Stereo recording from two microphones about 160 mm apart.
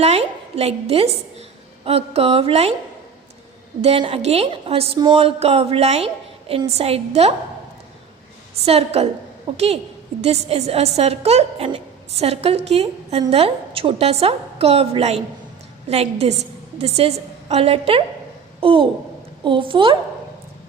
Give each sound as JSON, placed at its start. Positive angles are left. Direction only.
{"t": 0.0, "sound": "a woman's voice", "side_deg": -40}
{"t": 3.8, "sound": "a woman's voice", "side_deg": -40}
{"t": 8.6, "sound": "a woman's voice", "side_deg": -40}